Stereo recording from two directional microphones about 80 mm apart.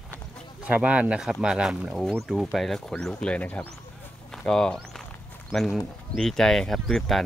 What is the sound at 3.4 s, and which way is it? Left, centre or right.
Speech, left.